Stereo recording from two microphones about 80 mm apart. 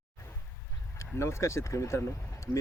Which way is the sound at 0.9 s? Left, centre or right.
Left.